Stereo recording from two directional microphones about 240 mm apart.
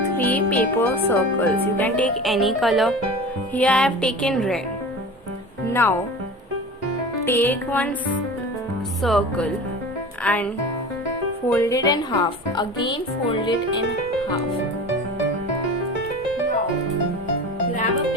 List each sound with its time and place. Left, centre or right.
0.2 s a woman's voice: centre
5.7 s a woman's voice: centre
7.3 s a woman's voice: centre
9.0 s a woman's voice: centre
11.5 s a woman's voice: centre